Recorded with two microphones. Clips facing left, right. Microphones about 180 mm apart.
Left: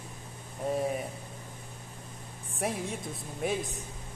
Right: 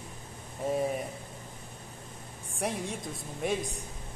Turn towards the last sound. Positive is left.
turn(degrees=0)  # may be behind; listen again after turning